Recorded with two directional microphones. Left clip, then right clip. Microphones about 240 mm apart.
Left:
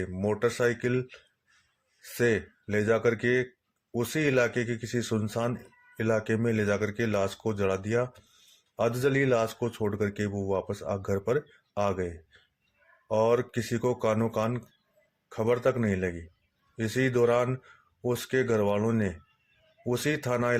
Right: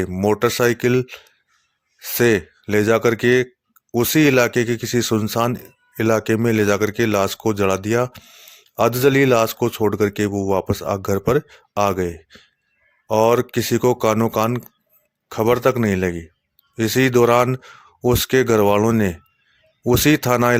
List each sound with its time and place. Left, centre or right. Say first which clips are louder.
0.0 s speech: right 10 dB; right